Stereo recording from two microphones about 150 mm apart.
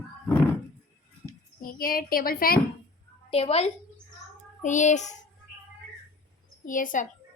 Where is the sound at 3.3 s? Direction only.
40° left (ahead or behind).